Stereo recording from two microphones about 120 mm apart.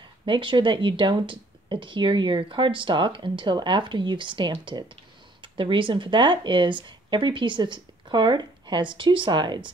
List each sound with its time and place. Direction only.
0.2 s speech: 45° right (ahead or behind)